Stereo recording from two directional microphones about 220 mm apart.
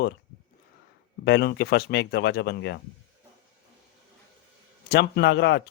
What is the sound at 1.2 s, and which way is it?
Speech, 50° left (ahead or behind).